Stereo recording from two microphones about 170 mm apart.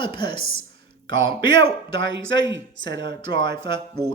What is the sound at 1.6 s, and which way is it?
A woman's voice, 90° right.